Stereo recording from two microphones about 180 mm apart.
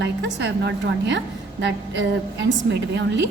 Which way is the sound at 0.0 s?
75° right (ahead or behind).